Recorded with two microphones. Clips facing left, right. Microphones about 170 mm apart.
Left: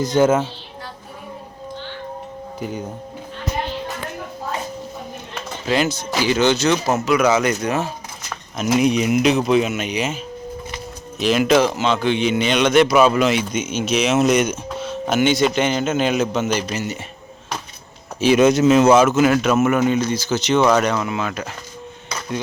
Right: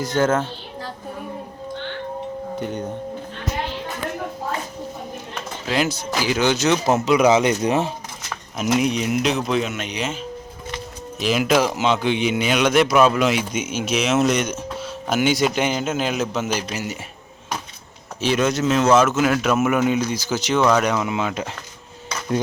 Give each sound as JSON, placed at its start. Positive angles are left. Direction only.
{"t": 0.0, "sound": "speech", "side_deg": 15}
{"t": 2.6, "sound": "a man's voice", "side_deg": 5}
{"t": 5.6, "sound": "a man's voice", "side_deg": -5}
{"t": 7.3, "sound": "speech", "side_deg": -25}
{"t": 8.5, "sound": "speech", "side_deg": 0}
{"t": 11.2, "sound": "a man's voice", "side_deg": -5}
{"t": 11.7, "sound": "a man's voice", "side_deg": -15}
{"t": 14.8, "sound": "a man's voice", "side_deg": -5}
{"t": 18.2, "sound": "speech", "side_deg": 10}
{"t": 19.9, "sound": "a man's voice", "side_deg": -10}
{"t": 20.6, "sound": "speech", "side_deg": 5}
{"t": 20.8, "sound": "speech", "side_deg": -15}